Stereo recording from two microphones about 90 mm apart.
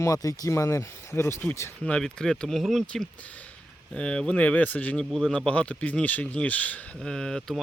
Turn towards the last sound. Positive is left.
turn(degrees=5)  # may be behind; listen again after turning